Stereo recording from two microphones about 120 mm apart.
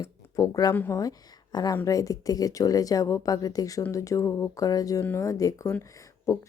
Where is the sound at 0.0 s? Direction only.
25° left (ahead or behind).